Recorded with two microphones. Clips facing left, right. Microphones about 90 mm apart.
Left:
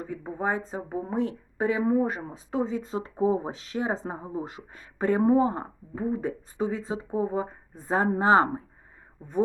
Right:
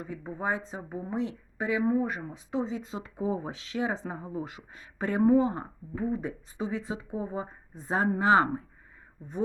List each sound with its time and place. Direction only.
0.0 s speech: 40° left (ahead or behind)